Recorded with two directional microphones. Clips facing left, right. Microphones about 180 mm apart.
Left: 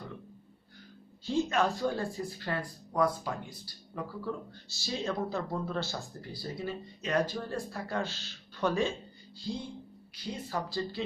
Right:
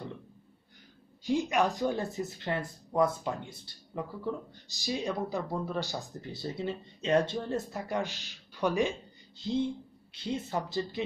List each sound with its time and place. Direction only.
1.2 s speech: 15° right (ahead or behind)